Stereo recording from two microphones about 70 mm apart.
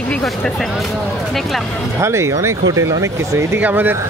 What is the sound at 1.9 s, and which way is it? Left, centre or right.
Speech, right.